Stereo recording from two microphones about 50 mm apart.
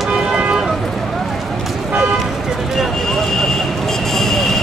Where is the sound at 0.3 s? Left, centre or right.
Right.